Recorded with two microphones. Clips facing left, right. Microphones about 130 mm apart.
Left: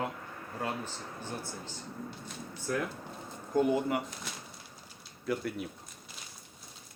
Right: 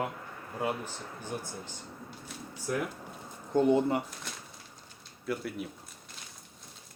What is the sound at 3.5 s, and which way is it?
Speech, 25° right (ahead or behind).